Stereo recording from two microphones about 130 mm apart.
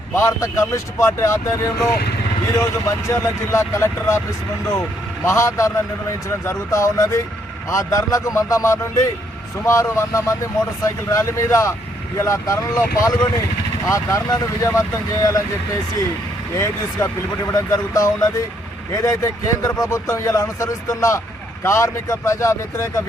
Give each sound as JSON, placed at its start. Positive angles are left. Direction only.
{"t": 0.1, "sound": "speech", "side_deg": 20}
{"t": 5.2, "sound": "speech", "side_deg": 20}
{"t": 17.5, "sound": "speech", "side_deg": 25}